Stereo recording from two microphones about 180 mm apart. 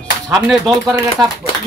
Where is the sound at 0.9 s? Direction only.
15° right (ahead or behind).